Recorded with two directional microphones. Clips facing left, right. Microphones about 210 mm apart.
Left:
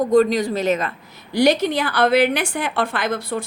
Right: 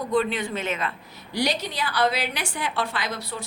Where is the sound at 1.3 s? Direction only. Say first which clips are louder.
Left 10 dB; 55° left (ahead or behind).